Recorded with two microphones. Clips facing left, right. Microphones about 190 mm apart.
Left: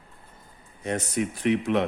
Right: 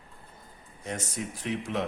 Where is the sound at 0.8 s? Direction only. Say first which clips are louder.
Left 8 dB; 65° left (ahead or behind).